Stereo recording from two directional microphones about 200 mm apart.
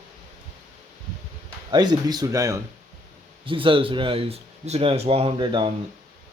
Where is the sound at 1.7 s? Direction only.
20° right (ahead or behind).